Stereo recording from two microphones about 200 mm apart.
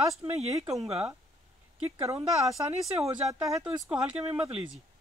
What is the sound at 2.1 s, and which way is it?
Speech, 20° right (ahead or behind).